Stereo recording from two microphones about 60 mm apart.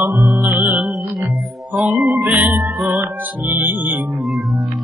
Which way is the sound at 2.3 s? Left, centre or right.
Right.